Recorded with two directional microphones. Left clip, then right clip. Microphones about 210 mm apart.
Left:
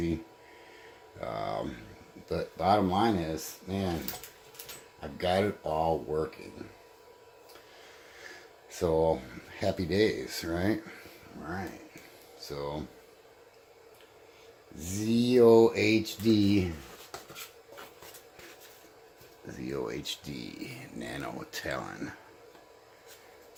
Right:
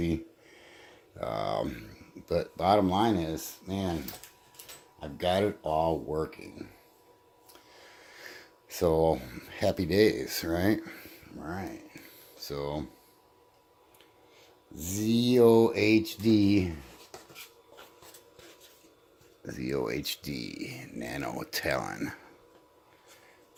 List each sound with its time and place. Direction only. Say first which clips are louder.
1.2 s speech: right 3 dB; 45° right (ahead or behind)
4.9 s speech: right 1 dB; 50° right (ahead or behind)
8.2 s speech: right 1 dB; 50° right (ahead or behind)
12.4 s speech: right 2 dB; 50° right (ahead or behind)
14.8 s speech: right 1 dB; 50° right (ahead or behind)
19.5 s speech: right 4 dB; 40° right (ahead or behind)